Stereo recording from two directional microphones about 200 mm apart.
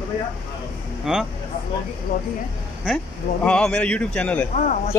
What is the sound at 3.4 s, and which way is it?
Speech, 5° left (ahead or behind).